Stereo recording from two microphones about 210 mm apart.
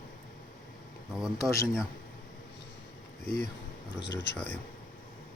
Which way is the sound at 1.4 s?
15° left (ahead or behind).